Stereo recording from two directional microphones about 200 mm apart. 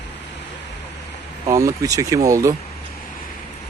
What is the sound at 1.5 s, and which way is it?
Speech, 15° right (ahead or behind).